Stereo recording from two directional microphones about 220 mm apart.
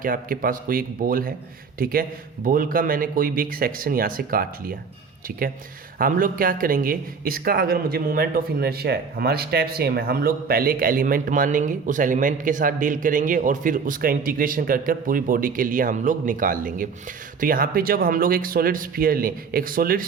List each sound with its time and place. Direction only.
0.0 s speech: 40° right (ahead or behind)
6.0 s speech: 40° right (ahead or behind)